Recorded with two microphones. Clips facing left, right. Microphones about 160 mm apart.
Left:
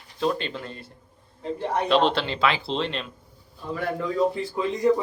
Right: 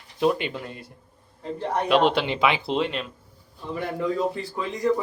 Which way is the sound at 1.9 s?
10° right (ahead or behind).